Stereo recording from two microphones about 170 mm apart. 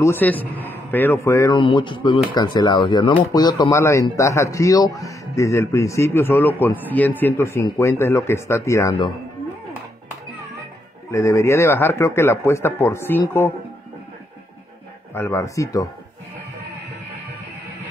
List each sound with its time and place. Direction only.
0.0 s a man's voice: 10° left (ahead or behind)
1.6 s a man's voice: 30° left (ahead or behind)
11.1 s a man's voice: 15° left (ahead or behind)
15.1 s speech: 15° left (ahead or behind)